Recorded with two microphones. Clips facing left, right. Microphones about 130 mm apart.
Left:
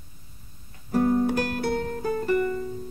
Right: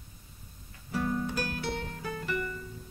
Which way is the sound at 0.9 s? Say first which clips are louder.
Left 10 dB; 45° left (ahead or behind).